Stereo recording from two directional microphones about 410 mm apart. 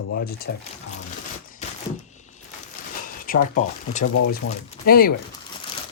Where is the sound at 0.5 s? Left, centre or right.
Left.